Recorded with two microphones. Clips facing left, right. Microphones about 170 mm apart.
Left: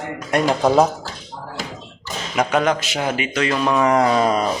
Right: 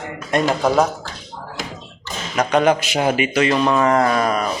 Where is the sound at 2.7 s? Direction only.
15° right (ahead or behind).